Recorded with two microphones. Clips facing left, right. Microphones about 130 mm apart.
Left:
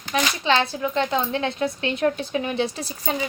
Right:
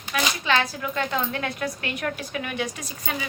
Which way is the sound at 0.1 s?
30° left (ahead or behind).